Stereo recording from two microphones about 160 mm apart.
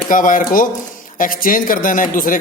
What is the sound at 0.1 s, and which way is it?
Speech, 55° left (ahead or behind).